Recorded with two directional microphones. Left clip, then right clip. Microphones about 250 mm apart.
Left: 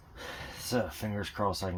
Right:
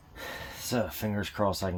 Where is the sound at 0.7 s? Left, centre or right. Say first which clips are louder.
Right 2 dB; right.